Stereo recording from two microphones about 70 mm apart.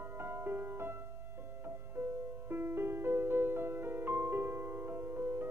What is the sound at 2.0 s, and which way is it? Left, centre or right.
Music, right.